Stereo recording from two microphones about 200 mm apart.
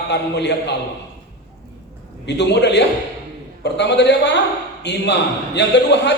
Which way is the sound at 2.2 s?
60° left (ahead or behind).